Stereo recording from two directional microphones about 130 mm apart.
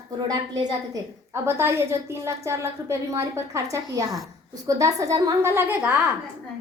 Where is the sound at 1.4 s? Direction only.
20° right (ahead or behind).